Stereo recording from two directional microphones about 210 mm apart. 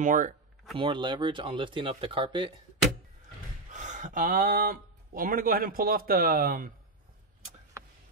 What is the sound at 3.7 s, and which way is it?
Speech, 35° right (ahead or behind).